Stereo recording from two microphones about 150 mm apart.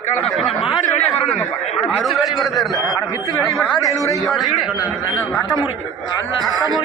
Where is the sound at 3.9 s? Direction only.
20° left (ahead or behind).